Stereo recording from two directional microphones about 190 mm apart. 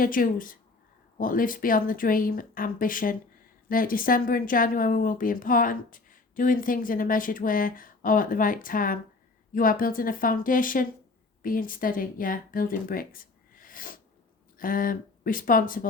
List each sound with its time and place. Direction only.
0.0 s speech: 45° left (ahead or behind)